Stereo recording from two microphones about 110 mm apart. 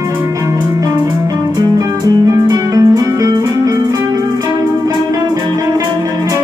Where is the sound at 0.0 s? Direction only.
25° right (ahead or behind).